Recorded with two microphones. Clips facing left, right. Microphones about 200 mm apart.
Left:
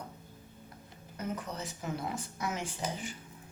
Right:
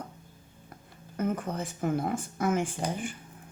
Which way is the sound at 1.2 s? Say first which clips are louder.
Right 7 dB; 50° right (ahead or behind).